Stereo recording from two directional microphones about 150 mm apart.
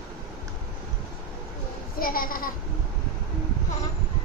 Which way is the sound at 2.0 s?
75° left (ahead or behind).